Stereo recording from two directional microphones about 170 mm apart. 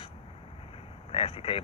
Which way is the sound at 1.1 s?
35° left (ahead or behind).